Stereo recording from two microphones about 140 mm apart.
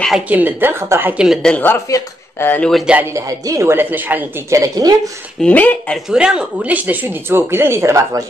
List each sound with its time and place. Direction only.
0.3 s speech: 15° right (ahead or behind); by 1.8 s 10° left (ahead or behind)
1.9 s speech: 25° left (ahead or behind)
2.5 s speech: 5° left (ahead or behind)
2.9 s speech: 15° right (ahead or behind)
5.4 s speech: 10° left (ahead or behind)
6.0 s speech: 5° right (ahead or behind)